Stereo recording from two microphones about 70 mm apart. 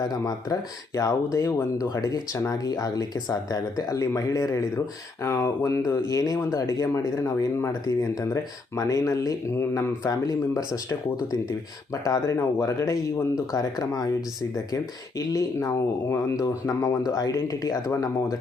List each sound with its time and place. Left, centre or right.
0.0 s speech: left
0.9 s speech: left
1.8 s speech: left
5.2 s speech: left
10.0 s speech: left
12.0 s speech: left
15.2 s speech: left